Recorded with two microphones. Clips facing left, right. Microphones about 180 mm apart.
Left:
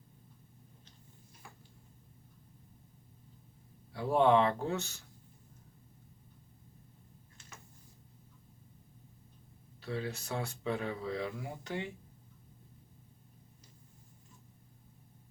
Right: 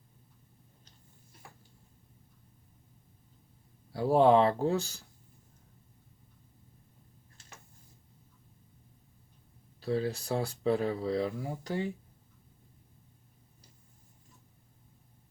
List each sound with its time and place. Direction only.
3.9 s speech: 35° right (ahead or behind)
9.8 s speech: 35° right (ahead or behind)